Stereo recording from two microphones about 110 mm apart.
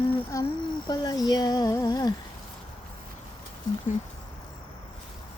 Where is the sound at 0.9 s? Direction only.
35° left (ahead or behind).